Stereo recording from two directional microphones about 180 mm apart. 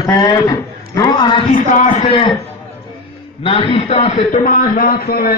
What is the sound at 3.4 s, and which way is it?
A man's voice, 30° left (ahead or behind).